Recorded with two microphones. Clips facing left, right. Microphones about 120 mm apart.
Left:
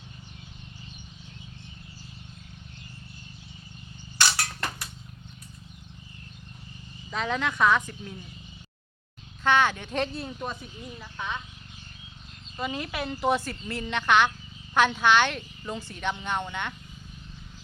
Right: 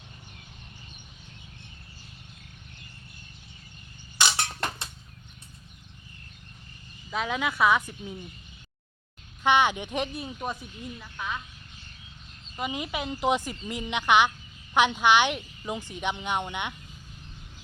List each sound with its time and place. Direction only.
4.2 s a sound: 20° right (ahead or behind)
7.1 s a woman's voice: 5° right (ahead or behind)
9.4 s a woman's voice: 15° right (ahead or behind)
12.5 s a woman's voice: 15° right (ahead or behind)